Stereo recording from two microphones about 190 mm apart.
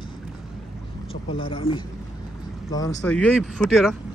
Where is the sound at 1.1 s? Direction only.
25° left (ahead or behind).